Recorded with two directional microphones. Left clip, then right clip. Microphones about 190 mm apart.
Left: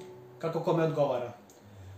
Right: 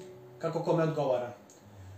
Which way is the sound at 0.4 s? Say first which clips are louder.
Left 1 dB; 30° left (ahead or behind).